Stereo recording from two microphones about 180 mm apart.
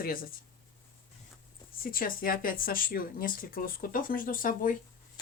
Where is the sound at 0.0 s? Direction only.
55° left (ahead or behind).